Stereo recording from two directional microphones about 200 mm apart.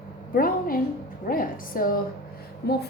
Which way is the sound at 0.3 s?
45° left (ahead or behind).